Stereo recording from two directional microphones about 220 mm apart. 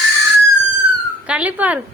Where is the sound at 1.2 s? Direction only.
5° right (ahead or behind).